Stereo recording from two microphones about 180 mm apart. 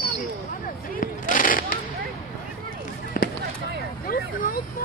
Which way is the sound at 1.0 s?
50° left (ahead or behind).